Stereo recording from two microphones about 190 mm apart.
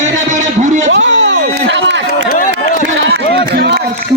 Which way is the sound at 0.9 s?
75° right (ahead or behind).